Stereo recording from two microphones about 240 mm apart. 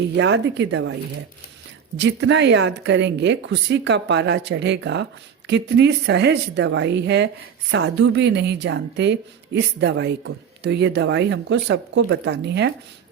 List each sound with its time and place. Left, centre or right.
0.2 s speech: right
2.0 s speech: right